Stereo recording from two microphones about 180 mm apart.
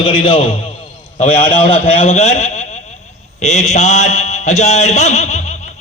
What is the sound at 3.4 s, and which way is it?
Mantra, 40° left (ahead or behind).